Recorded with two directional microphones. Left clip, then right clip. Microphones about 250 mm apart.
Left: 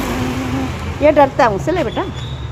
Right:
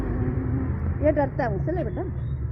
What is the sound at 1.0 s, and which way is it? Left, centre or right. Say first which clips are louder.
Speech: left 13 dB; left.